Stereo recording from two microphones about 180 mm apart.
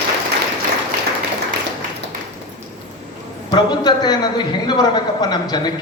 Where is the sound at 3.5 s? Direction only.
25° left (ahead or behind).